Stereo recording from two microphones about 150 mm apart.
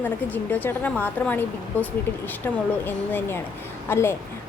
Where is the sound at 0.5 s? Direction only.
10° left (ahead or behind).